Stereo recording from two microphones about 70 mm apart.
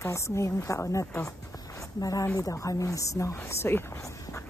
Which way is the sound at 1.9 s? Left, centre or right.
Left.